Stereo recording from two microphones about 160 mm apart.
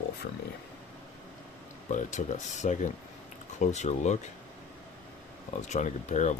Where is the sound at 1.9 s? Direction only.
50° left (ahead or behind).